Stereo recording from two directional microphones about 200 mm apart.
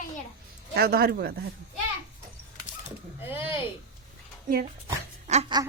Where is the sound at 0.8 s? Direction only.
50° right (ahead or behind).